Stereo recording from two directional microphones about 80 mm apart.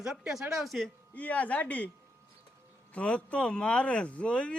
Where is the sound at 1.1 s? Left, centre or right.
Centre.